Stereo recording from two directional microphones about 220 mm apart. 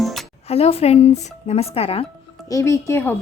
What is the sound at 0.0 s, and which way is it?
Music, centre (ahead or behind).